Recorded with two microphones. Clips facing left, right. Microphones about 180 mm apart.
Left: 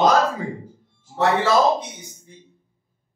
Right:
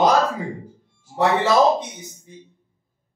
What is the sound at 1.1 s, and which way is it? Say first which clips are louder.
Speech: even; 20° right (ahead or behind).